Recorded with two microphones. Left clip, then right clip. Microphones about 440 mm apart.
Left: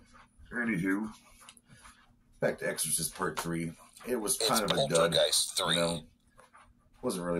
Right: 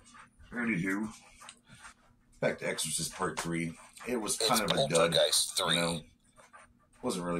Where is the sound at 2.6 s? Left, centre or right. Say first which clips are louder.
Even; left.